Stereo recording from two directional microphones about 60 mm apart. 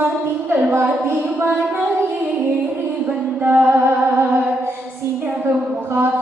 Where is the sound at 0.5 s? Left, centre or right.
Right.